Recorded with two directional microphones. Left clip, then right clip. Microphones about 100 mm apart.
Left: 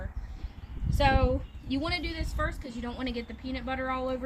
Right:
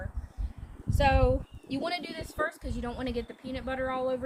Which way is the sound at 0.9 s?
45° right (ahead or behind).